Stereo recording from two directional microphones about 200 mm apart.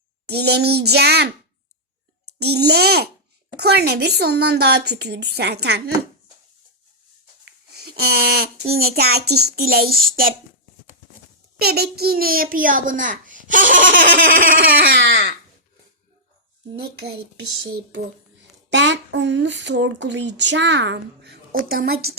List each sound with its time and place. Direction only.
0.3 s a child's voice: 55° right (ahead or behind)
2.4 s a child's voice: 55° right (ahead or behind)
7.4 s a sound: 55° right (ahead or behind)
9.0 s a child's voice: 55° right (ahead or behind)
11.6 s a child's voice: 50° right (ahead or behind)
16.7 s a child's voice: 55° right (ahead or behind)
18.7 s speech: 65° right (ahead or behind)
21.5 s a child's voice: 45° right (ahead or behind)